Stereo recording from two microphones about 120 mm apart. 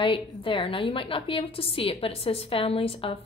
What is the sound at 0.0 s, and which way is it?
A woman's voice, 45° left (ahead or behind).